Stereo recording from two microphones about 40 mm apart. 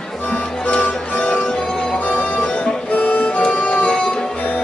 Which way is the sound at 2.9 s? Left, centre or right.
Left.